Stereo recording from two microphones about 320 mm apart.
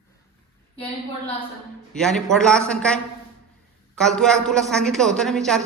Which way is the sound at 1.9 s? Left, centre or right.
Centre.